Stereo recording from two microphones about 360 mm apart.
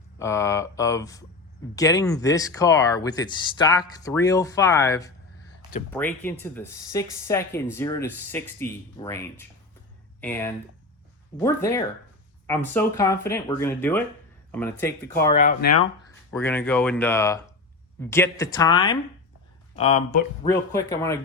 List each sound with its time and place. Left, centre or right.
0.2 s speech: centre
15.2 s speech: centre
16.3 s speech: centre
20.5 s speech: centre